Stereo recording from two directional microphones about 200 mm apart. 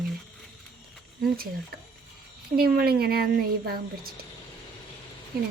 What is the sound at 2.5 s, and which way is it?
Speech, 50° right (ahead or behind).